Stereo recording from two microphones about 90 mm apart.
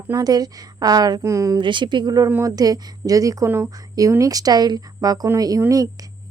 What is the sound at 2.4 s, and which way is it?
A woman's voice, 45° right (ahead or behind).